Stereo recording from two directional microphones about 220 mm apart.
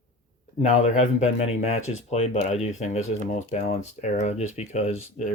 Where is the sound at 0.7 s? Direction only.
30° left (ahead or behind).